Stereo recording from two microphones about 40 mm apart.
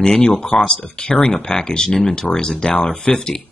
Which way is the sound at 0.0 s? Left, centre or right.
Centre.